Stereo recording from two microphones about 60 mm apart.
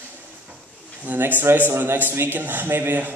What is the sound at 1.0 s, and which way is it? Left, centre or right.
Speech, right.